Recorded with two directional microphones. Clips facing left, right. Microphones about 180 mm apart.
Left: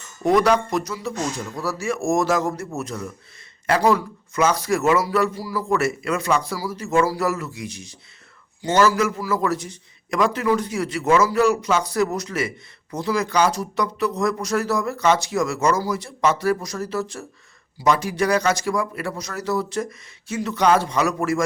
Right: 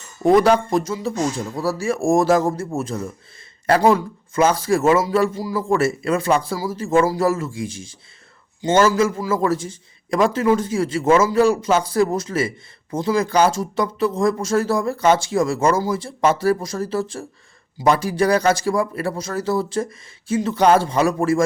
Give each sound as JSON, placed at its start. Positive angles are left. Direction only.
{"t": 0.2, "sound": "a man's voice", "side_deg": -30}